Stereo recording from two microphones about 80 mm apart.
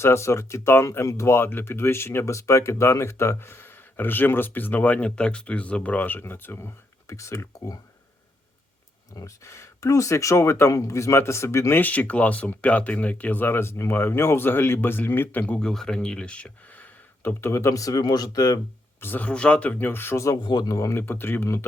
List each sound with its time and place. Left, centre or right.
0.0 s speech: left
7.1 s speech: left
9.1 s speech: left
11.8 s speech: centre; by 18.6 s left
18.9 s speech: left
19.3 s speech: centre
19.9 s speech: left
20.4 s speech: left
21.1 s speech: left